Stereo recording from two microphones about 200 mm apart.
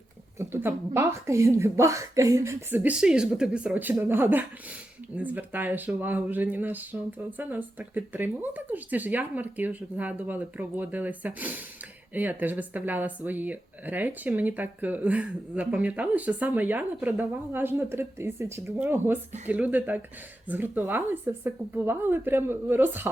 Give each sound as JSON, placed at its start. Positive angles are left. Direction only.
{"t": 0.3, "sound": "speech", "side_deg": -10}